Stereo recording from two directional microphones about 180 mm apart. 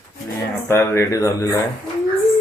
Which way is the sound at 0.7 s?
15° left (ahead or behind).